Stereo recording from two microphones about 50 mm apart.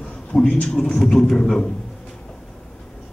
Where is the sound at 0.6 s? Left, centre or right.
Centre.